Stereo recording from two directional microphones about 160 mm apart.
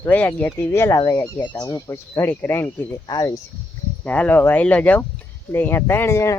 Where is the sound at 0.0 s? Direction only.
10° left (ahead or behind).